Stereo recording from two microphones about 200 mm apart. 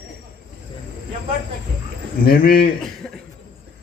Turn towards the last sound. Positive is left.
turn(degrees=5)  # may be behind; listen again after turning